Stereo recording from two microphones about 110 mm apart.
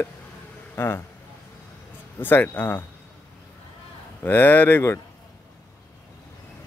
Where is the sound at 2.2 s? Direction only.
20° left (ahead or behind).